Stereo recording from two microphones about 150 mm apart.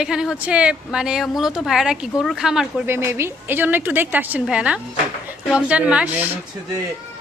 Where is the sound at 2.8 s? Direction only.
15° right (ahead or behind).